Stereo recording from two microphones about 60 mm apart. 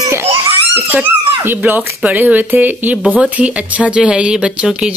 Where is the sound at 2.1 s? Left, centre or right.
Right.